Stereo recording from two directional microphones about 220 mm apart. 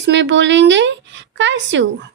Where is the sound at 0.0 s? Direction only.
55° right (ahead or behind).